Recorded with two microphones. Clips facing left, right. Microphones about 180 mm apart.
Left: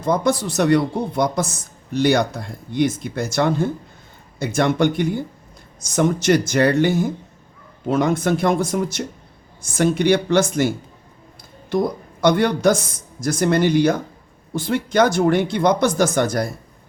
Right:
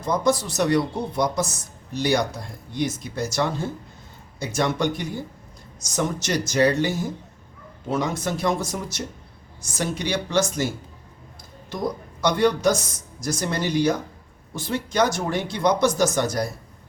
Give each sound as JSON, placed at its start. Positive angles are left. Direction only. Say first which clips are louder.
{"t": 0.0, "sound": "speech", "louder": "left 3 dB", "side_deg": 55}
{"t": 12.2, "sound": "speech", "louder": "left 4 dB", "side_deg": 55}